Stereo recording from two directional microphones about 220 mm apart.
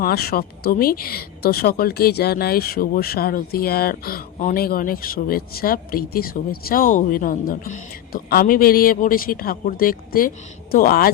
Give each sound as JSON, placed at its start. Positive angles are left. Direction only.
{"t": 0.0, "sound": "speech", "side_deg": 45}